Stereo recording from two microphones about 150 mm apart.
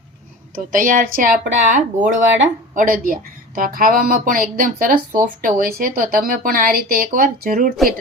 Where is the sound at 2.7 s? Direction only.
70° right (ahead or behind).